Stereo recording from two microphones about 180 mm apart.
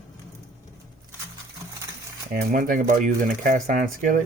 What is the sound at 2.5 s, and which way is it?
Speech, 50° right (ahead or behind).